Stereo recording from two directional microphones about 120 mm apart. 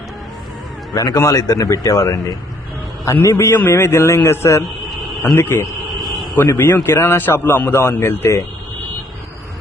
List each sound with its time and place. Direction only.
0.9 s a man's voice: 30° left (ahead or behind)
5.6 s a sound: centre (ahead or behind)
6.3 s a man's voice: 20° left (ahead or behind)